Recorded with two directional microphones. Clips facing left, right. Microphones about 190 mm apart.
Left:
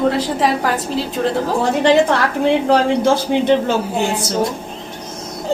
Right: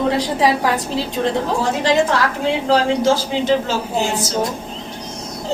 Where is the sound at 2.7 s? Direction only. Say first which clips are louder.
Left 1 dB; 55° left (ahead or behind).